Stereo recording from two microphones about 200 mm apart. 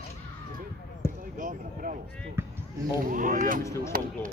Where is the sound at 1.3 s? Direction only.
40° right (ahead or behind).